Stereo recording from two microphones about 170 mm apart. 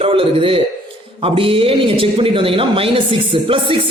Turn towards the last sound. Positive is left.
turn(degrees=-30)  # may be behind; listen again after turning